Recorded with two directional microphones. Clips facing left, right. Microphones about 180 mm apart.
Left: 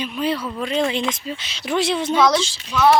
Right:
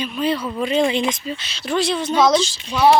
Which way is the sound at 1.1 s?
15° left (ahead or behind).